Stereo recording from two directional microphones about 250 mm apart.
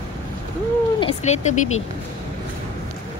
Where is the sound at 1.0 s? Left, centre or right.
Left.